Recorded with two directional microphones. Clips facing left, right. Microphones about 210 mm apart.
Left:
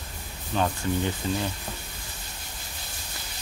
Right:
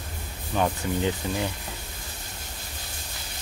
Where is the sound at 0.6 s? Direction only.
15° right (ahead or behind).